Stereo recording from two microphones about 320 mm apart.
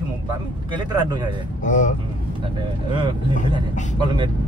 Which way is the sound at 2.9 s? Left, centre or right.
Centre.